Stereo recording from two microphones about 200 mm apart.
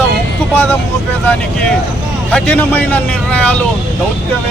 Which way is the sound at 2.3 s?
5° left (ahead or behind).